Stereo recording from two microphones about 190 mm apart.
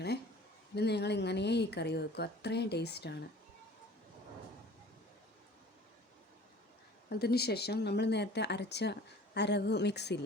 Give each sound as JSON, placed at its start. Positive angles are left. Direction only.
{"t": 0.8, "sound": "speech", "side_deg": 60}
{"t": 7.1, "sound": "speech", "side_deg": 55}